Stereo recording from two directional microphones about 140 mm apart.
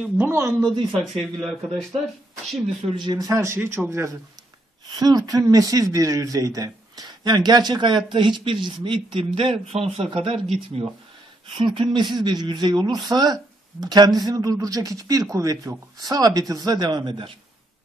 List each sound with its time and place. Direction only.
0.0 s speech: 15° right (ahead or behind)
1.0 s speech: centre (ahead or behind)
2.9 s speech: 30° right (ahead or behind)
4.9 s speech: 30° right (ahead or behind)